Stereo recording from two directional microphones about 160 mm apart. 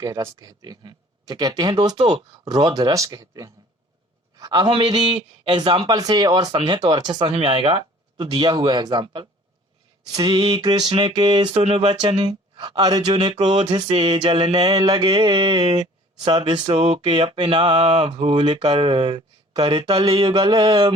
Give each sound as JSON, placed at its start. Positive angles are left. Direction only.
{"t": 0.0, "sound": "a man's voice", "side_deg": -20}
{"t": 16.2, "sound": "mantra", "side_deg": -30}
{"t": 20.1, "sound": "a man's voice", "side_deg": -30}